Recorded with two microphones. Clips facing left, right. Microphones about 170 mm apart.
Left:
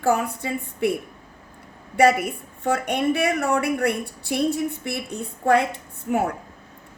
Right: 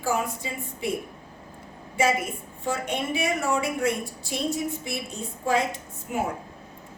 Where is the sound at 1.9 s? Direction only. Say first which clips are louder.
Left 6 dB; 65° left (ahead or behind).